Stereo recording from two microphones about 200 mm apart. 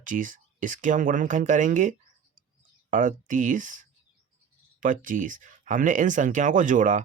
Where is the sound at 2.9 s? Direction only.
40° right (ahead or behind).